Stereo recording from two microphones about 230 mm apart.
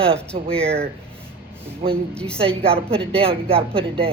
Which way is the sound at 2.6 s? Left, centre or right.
Right.